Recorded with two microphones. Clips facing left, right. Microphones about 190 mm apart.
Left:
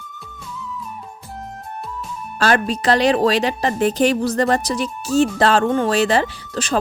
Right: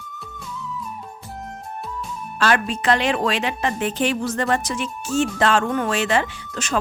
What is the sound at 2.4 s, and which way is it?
A woman's voice, 40° left (ahead or behind).